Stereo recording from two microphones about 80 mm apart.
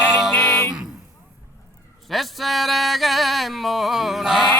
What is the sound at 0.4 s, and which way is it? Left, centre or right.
Music, left.